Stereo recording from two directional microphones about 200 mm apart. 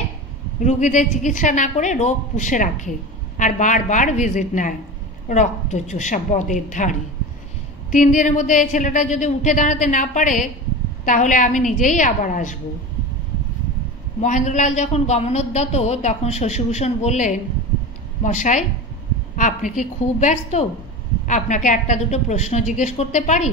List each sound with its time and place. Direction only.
0.7 s a woman's voice: 35° left (ahead or behind)
14.2 s a woman's voice: 35° left (ahead or behind)